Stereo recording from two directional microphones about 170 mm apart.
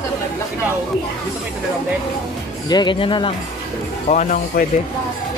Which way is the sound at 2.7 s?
25° left (ahead or behind).